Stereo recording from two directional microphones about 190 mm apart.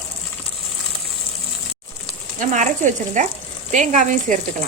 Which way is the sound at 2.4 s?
40° right (ahead or behind).